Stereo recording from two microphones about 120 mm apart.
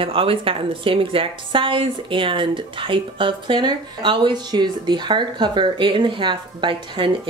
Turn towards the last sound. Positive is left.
turn(degrees=-45)  # may be behind; listen again after turning